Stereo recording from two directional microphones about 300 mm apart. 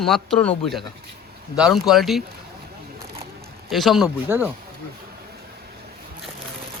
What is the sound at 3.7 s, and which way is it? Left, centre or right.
Speech, centre.